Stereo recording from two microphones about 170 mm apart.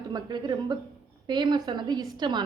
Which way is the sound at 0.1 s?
25° right (ahead or behind).